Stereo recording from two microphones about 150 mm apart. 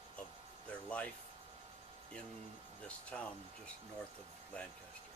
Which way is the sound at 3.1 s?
5° left (ahead or behind).